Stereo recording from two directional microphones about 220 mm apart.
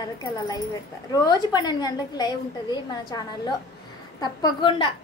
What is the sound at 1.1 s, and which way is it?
A child's voice, 15° left (ahead or behind).